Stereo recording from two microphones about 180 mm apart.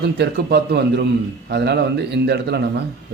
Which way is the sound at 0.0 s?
65° right (ahead or behind).